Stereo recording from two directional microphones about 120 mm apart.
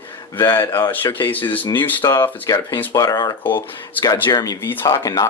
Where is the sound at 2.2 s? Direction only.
25° left (ahead or behind).